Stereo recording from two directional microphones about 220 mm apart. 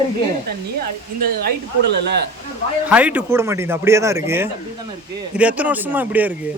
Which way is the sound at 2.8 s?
5° right (ahead or behind).